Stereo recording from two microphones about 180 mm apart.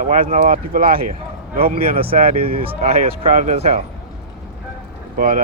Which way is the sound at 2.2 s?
55° right (ahead or behind).